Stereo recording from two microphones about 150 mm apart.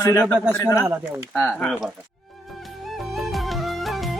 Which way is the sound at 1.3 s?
Centre (ahead or behind).